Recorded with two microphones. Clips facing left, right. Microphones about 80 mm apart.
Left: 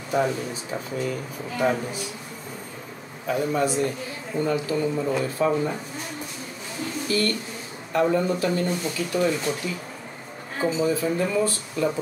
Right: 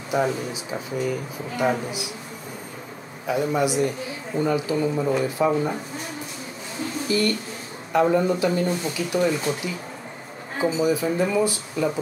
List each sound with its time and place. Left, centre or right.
0.1 s speech: centre
3.3 s speech: centre
7.1 s speech: right
10.6 s speech: centre